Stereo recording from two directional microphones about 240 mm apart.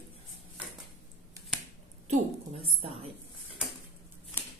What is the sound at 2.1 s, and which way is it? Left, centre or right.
A woman's voice, right.